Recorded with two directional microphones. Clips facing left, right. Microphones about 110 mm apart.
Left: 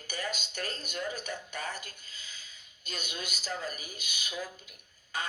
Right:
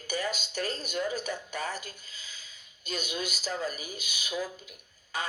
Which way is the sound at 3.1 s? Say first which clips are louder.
Right 5 dB; 40° right (ahead or behind).